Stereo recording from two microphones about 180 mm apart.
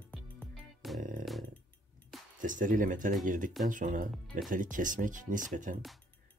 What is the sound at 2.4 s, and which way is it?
Speech, 45° right (ahead or behind).